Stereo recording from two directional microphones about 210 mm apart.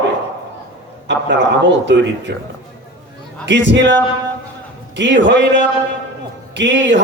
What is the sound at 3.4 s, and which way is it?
Speech, 55° right (ahead or behind).